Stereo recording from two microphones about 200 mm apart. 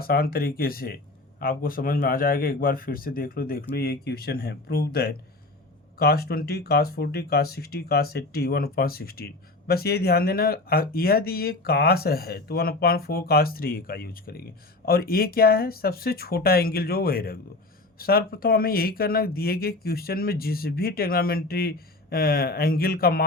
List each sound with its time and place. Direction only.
0.0 s speech: 50° left (ahead or behind)